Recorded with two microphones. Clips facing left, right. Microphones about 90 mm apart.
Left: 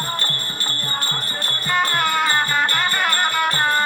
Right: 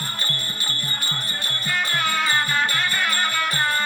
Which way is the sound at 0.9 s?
35° left (ahead or behind).